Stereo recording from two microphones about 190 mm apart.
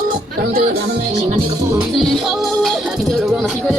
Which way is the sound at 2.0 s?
Centre (ahead or behind).